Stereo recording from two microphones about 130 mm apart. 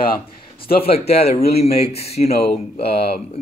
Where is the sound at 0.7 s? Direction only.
50° left (ahead or behind).